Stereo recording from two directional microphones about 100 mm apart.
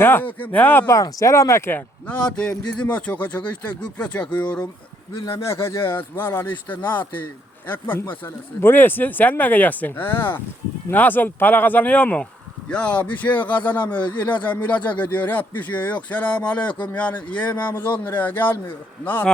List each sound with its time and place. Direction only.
0.0 s speech: 20° left (ahead or behind)
0.9 s speech: 30° left (ahead or behind)
2.0 s speech: 10° left (ahead or behind)
5.5 s speech: 25° left (ahead or behind)
7.7 s speech: 20° left (ahead or behind)